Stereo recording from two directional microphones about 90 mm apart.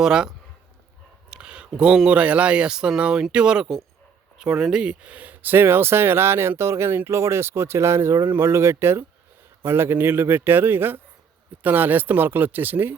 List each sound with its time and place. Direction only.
0.0 s speech: 5° right (ahead or behind); by 13.0 s 20° right (ahead or behind)